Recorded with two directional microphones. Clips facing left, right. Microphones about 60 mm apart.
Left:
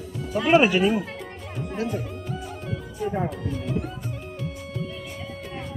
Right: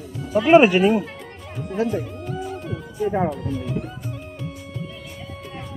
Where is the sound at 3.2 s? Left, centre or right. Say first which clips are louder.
Right 4 dB; centre.